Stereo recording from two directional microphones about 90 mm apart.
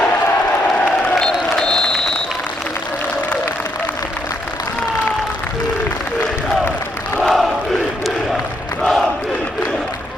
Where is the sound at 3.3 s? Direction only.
15° left (ahead or behind).